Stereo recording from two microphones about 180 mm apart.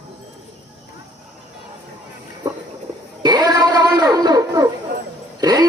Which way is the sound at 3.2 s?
25° right (ahead or behind).